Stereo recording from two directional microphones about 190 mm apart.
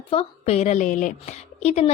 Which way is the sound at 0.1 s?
30° left (ahead or behind).